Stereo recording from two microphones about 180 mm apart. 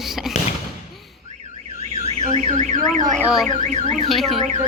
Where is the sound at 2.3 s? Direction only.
40° right (ahead or behind).